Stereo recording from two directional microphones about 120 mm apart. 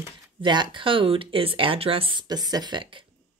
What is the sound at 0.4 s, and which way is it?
A woman's voice, 40° right (ahead or behind).